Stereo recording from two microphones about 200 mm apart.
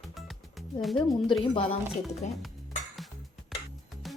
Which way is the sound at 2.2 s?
35° left (ahead or behind).